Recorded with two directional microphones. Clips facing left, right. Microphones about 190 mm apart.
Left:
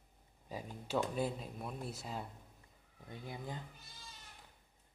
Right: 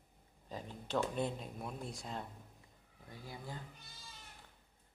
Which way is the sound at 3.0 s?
20° left (ahead or behind).